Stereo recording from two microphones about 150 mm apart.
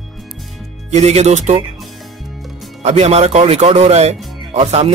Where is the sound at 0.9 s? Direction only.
45° right (ahead or behind).